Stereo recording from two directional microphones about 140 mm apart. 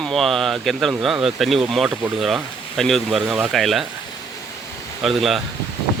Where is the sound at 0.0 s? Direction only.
Centre (ahead or behind).